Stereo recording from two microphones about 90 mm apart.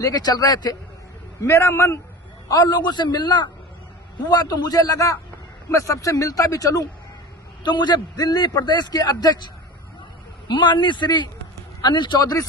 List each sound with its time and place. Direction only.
0.0 s a man's voice: 45° left (ahead or behind)
1.4 s a man's voice: 30° left (ahead or behind)
2.4 s a man's voice: 45° left (ahead or behind)
7.6 s a man's voice: 55° left (ahead or behind)
10.5 s a man's voice: 60° left (ahead or behind)